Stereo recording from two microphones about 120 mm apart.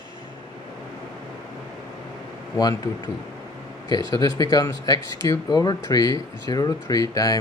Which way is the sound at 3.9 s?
35° left (ahead or behind).